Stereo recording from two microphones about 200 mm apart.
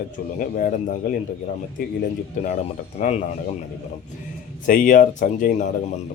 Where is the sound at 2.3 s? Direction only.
40° left (ahead or behind).